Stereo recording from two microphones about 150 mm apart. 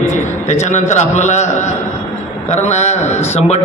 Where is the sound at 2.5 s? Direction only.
50° left (ahead or behind).